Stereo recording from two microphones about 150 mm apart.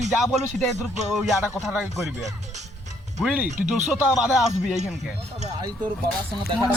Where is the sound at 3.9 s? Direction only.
5° right (ahead or behind).